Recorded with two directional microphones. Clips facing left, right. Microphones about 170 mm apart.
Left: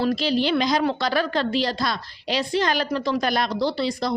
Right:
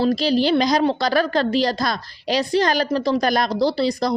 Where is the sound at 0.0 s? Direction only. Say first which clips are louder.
Right 4 dB; 35° right (ahead or behind).